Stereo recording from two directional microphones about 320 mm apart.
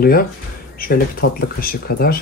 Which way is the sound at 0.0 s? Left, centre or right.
Left.